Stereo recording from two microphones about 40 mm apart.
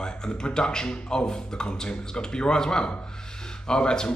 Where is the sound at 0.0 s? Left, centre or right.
Centre.